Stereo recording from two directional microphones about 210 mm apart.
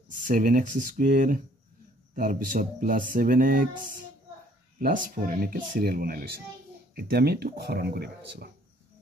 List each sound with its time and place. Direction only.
0.3 s speech: 40° right (ahead or behind)